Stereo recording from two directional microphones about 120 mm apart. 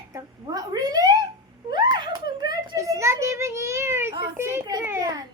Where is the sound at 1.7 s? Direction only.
35° right (ahead or behind); by 4.7 s 20° right (ahead or behind).